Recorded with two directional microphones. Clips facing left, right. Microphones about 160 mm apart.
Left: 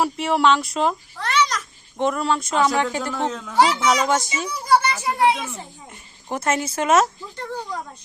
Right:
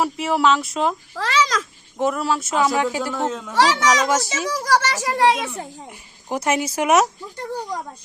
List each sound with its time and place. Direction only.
0.0 s speech: centre (ahead or behind)
1.2 s a child's voice: 90° right
2.0 s speech: 5° right (ahead or behind)
3.5 s a child's voice: 90° right
5.9 s speech: 10° right (ahead or behind)